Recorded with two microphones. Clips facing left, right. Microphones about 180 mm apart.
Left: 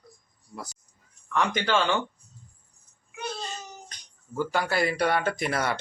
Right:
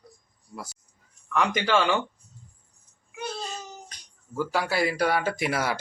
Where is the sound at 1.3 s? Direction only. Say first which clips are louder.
Right 1 dB; 10° right (ahead or behind).